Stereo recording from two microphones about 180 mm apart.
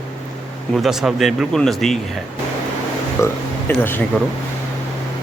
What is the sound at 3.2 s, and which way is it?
Speech, 15° left (ahead or behind).